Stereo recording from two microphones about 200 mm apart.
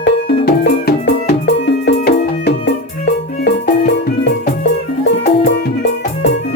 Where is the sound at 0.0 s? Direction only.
55° left (ahead or behind).